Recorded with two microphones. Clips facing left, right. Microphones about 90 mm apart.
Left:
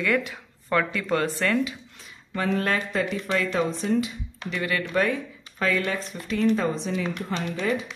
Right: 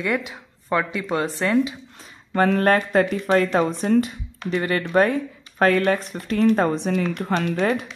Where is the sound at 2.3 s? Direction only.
50° right (ahead or behind).